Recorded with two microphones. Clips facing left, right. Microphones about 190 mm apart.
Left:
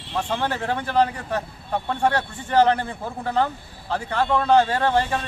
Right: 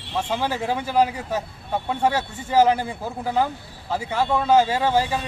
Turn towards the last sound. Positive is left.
turn(degrees=-5)  # may be behind; listen again after turning